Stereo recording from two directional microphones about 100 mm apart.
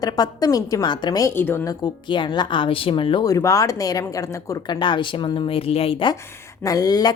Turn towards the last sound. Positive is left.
turn(degrees=40)  # may be behind; listen again after turning